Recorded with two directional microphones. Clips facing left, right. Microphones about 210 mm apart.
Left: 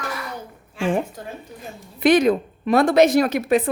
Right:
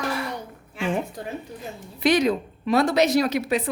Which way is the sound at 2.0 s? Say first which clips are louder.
Left 4 dB; 55° left (ahead or behind).